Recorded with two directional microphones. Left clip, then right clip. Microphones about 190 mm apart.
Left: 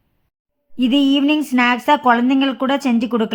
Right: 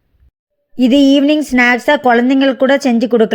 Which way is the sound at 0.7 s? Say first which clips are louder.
Right 6 dB; 15° right (ahead or behind).